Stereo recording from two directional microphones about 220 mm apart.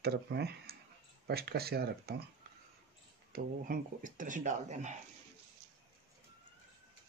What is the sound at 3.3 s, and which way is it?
Speech, 40° right (ahead or behind).